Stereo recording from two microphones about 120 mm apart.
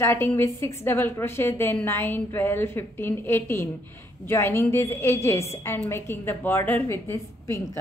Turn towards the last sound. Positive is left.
turn(degrees=20)  # may be behind; listen again after turning